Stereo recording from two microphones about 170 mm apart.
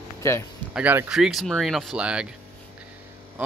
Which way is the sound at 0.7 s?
5° right (ahead or behind).